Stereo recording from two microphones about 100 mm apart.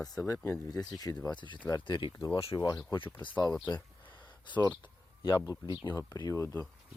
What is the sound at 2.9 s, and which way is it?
Speech, 55° left (ahead or behind).